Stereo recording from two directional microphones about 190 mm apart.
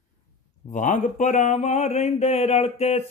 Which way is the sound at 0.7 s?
40° left (ahead or behind).